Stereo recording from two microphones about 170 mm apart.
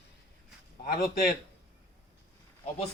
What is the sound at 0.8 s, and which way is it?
Speech, 60° left (ahead or behind).